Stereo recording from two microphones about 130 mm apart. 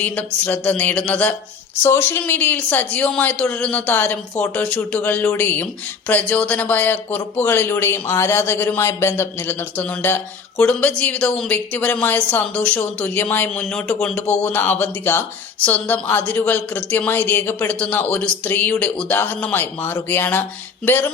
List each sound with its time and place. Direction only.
0.0 s speech: 10° left (ahead or behind)